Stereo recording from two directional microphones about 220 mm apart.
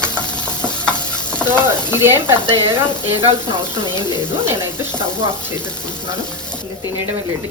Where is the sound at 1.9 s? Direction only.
10° right (ahead or behind).